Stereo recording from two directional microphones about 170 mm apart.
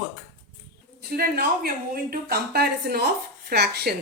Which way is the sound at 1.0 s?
60° right (ahead or behind).